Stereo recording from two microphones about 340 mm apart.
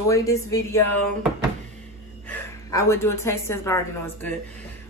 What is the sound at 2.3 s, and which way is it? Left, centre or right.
A woman's voice, centre.